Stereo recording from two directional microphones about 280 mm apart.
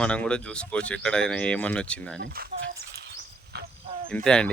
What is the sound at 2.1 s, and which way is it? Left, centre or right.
Speech, right.